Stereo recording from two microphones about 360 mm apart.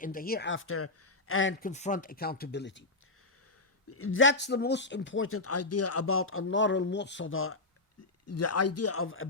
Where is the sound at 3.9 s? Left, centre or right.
Left.